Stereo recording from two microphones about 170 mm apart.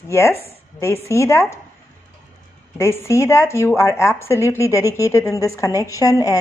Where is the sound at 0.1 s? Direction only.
15° left (ahead or behind).